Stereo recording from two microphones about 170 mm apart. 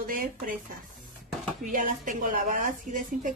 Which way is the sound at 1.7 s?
50° right (ahead or behind).